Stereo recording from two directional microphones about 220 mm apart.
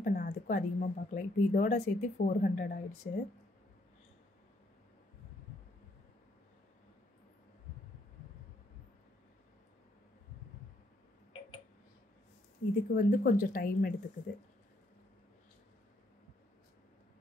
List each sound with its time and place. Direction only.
0.0 s a woman's voice: 40° left (ahead or behind)
12.9 s a woman's voice: 40° left (ahead or behind)